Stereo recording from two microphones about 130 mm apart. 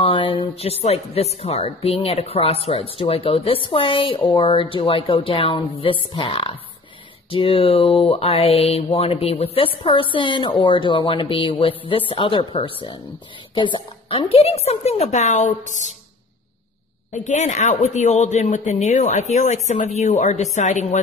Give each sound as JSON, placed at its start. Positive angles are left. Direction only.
{"t": 0.0, "sound": "mantra", "side_deg": 40}
{"t": 3.0, "sound": "speech", "side_deg": 45}
{"t": 6.1, "sound": "mantra", "side_deg": 40}
{"t": 13.6, "sound": "a woman's voice", "side_deg": 40}
{"t": 17.1, "sound": "a woman's voice", "side_deg": 65}
{"t": 19.7, "sound": "a woman's voice", "side_deg": 55}